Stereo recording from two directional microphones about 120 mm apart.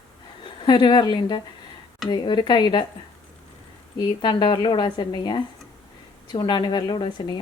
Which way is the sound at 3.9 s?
40° left (ahead or behind).